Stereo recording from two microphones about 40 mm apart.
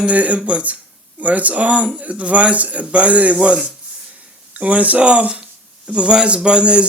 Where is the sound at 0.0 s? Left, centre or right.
Right.